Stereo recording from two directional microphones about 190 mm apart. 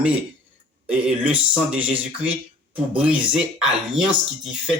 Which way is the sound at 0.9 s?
5° right (ahead or behind).